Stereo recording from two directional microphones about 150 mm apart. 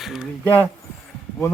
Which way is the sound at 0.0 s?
Centre (ahead or behind).